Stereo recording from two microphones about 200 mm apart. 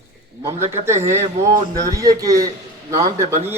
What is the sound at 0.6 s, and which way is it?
Speech, 35° right (ahead or behind).